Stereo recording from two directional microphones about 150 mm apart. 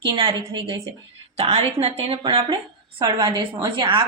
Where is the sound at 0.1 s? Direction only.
35° right (ahead or behind).